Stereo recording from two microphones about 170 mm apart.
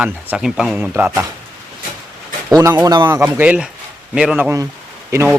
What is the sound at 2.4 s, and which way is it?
Speech, 20° right (ahead or behind).